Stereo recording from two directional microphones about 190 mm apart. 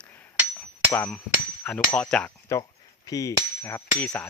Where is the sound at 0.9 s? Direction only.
10° left (ahead or behind).